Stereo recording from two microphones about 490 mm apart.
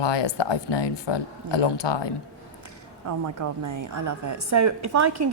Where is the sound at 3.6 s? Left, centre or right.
Right.